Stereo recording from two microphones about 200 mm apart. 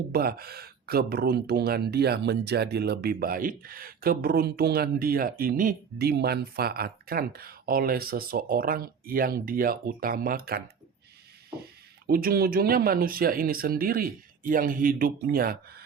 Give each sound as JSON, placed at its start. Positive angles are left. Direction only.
{"t": 0.1, "sound": "speech", "side_deg": -50}
{"t": 12.0, "sound": "speech", "side_deg": -45}